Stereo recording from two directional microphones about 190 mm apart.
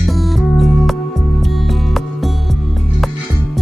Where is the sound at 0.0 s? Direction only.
Centre (ahead or behind).